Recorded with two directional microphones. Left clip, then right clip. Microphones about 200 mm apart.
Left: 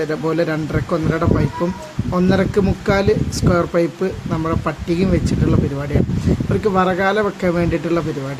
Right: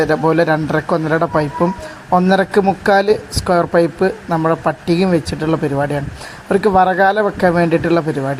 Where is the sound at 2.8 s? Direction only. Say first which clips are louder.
Right 4 dB; 25° right (ahead or behind).